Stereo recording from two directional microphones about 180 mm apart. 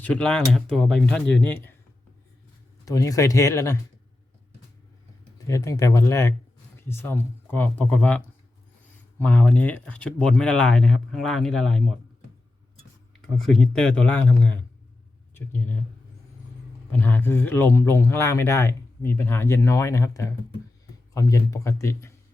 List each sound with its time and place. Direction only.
0.0 s speech: 5° left (ahead or behind)
2.8 s speech: 20° left (ahead or behind)
5.5 s speech: 20° left (ahead or behind)
13.2 s speech: centre (ahead or behind)
16.9 s speech: 10° left (ahead or behind)